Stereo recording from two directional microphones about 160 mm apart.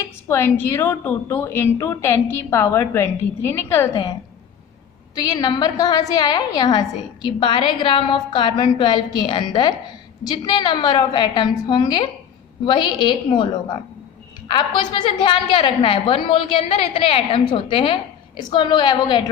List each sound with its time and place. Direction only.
0.3 s a woman's voice: 15° left (ahead or behind)
5.1 s a woman's voice: 25° left (ahead or behind)
15.2 s a woman's voice: 30° left (ahead or behind)